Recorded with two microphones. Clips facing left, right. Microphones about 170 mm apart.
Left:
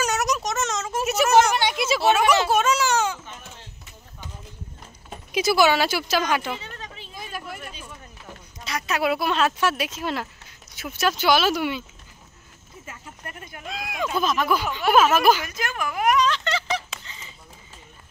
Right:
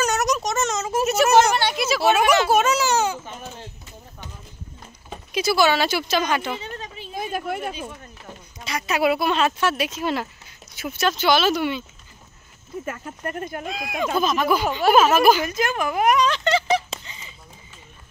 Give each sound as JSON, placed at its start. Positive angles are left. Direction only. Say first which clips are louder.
{"t": 0.0, "sound": "a sound", "louder": "right 2 dB", "side_deg": 5}
{"t": 1.0, "sound": "a sound", "louder": "right 1 dB", "side_deg": 10}
{"t": 2.0, "sound": "a child's voice", "louder": "right 2 dB", "side_deg": -5}
{"t": 5.3, "sound": "speech", "louder": "even", "side_deg": 15}
{"t": 6.5, "sound": "a sound", "louder": "right 3 dB", "side_deg": -20}
{"t": 7.2, "sound": "speech", "louder": "right 9 dB", "side_deg": -50}
{"t": 8.6, "sound": "speech", "louder": "right 3 dB", "side_deg": 0}
{"t": 12.8, "sound": "speech", "louder": "right 9 dB", "side_deg": -60}
{"t": 13.7, "sound": "speech", "louder": "right 1 dB", "side_deg": 0}
{"t": 15.4, "sound": "speech", "louder": "right 6 dB", "side_deg": -25}
{"t": 17.0, "sound": "honk", "louder": "right 1 dB", "side_deg": -15}